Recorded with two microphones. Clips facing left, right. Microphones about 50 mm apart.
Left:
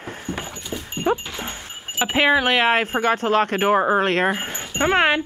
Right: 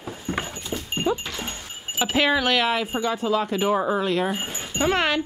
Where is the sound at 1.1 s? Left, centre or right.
Left.